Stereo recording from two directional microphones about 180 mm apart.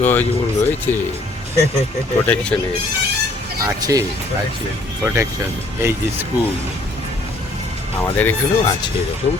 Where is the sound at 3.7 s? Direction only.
20° right (ahead or behind).